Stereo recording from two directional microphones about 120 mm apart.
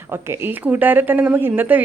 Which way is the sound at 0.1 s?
20° right (ahead or behind).